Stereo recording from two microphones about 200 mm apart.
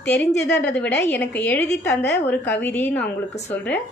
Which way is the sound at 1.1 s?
10° left (ahead or behind).